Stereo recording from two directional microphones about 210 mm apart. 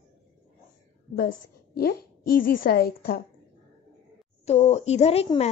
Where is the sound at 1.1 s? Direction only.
45° left (ahead or behind).